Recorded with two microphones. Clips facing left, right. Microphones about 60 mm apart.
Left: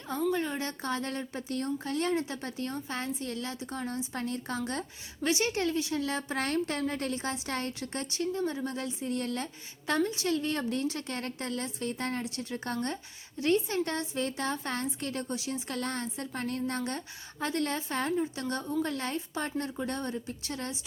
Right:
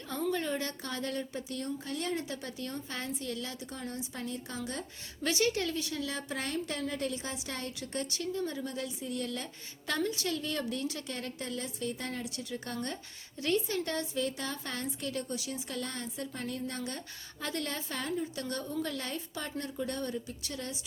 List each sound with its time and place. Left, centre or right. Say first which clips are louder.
0.3 s speech: left 1 dB; centre
0.9 s speech: left 3 dB; left
5.2 s speech: left 2 dB; left
6.3 s a woman's voice: left 5 dB; left
15.7 s a woman's voice: left 4 dB; left